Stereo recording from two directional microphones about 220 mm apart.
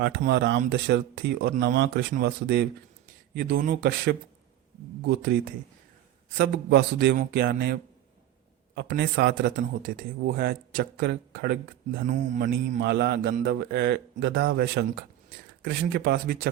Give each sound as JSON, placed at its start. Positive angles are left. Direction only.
{"t": 0.3, "sound": "a man's voice", "side_deg": -50}
{"t": 12.0, "sound": "a man's voice", "side_deg": -35}